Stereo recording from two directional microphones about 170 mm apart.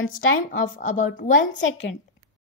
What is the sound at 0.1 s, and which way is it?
A woman's voice, 55° left (ahead or behind).